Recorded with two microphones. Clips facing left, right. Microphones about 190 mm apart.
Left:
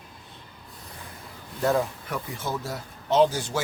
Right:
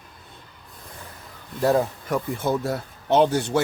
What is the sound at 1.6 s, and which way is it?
Speech, 35° right (ahead or behind).